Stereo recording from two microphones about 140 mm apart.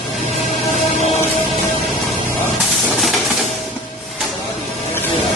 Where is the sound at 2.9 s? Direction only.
Centre (ahead or behind).